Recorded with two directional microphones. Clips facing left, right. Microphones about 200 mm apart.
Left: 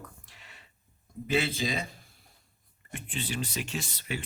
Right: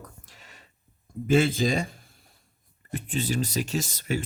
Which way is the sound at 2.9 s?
40° right (ahead or behind).